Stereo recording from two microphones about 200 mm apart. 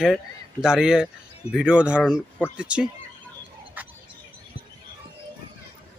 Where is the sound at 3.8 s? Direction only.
10° right (ahead or behind).